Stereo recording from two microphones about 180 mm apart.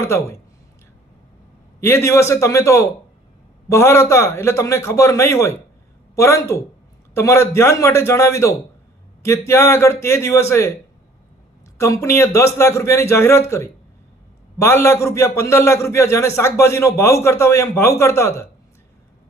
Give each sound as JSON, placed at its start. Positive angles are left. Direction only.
{"t": 0.0, "sound": "a man's voice", "side_deg": 15}
{"t": 1.8, "sound": "a man's voice", "side_deg": 15}
{"t": 11.8, "sound": "a man's voice", "side_deg": 15}